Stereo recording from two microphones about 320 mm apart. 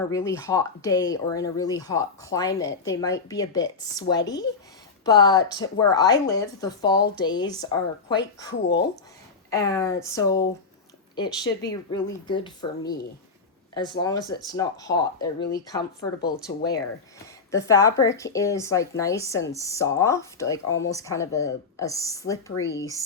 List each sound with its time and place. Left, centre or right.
0.1 s speech: centre
9.5 s speech: centre
17.7 s speech: centre